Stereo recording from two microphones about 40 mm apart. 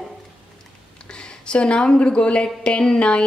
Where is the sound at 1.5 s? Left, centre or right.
Left.